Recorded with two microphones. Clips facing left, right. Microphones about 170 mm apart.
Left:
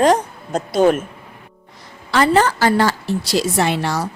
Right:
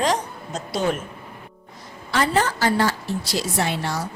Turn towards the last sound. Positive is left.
turn(degrees=90)